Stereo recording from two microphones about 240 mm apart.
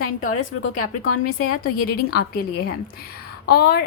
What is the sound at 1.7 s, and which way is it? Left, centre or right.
Speech, left.